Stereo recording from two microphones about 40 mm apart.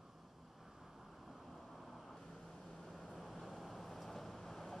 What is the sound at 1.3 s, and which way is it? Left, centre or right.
Vehicle, centre.